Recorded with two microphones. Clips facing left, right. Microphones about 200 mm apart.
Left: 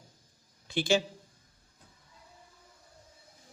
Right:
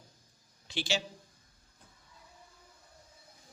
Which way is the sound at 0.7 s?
55° left (ahead or behind).